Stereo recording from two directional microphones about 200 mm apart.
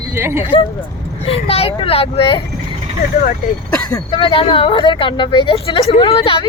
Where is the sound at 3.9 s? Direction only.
25° left (ahead or behind).